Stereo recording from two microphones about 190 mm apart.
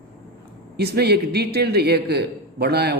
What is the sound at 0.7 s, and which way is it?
Speech, 55° right (ahead or behind).